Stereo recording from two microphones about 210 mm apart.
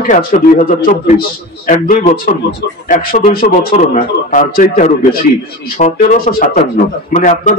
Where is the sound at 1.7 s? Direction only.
35° left (ahead or behind).